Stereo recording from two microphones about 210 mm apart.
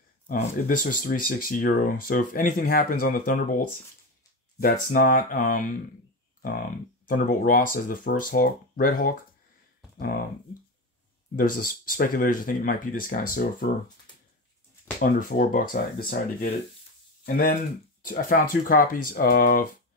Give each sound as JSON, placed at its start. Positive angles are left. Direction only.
{"t": 0.3, "sound": "speech", "side_deg": 40}
{"t": 4.9, "sound": "speech", "side_deg": 40}
{"t": 7.1, "sound": "speech", "side_deg": 40}
{"t": 11.3, "sound": "speech", "side_deg": 40}
{"t": 15.0, "sound": "speech", "side_deg": 40}